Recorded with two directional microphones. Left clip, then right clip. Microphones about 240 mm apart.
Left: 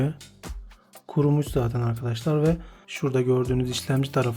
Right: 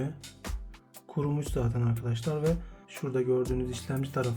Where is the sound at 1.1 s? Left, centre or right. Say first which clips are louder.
Left 9 dB; left.